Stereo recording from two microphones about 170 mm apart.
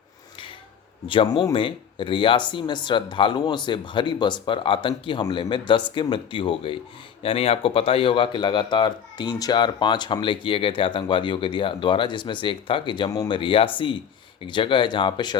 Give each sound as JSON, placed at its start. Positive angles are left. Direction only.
{"t": 1.0, "sound": "speech", "side_deg": 30}